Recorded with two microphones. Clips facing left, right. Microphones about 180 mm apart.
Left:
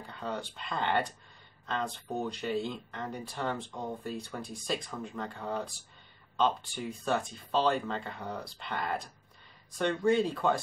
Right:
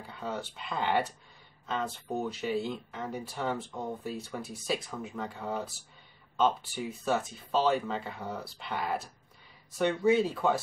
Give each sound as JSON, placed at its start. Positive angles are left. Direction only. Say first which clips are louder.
{"t": 0.0, "sound": "speech", "louder": "even", "side_deg": -5}